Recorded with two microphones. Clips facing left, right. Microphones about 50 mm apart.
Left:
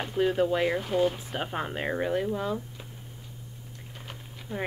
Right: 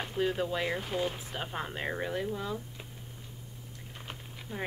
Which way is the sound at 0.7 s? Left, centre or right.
Centre.